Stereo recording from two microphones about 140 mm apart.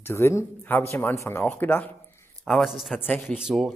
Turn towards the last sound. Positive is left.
turn(degrees=-5)  # may be behind; listen again after turning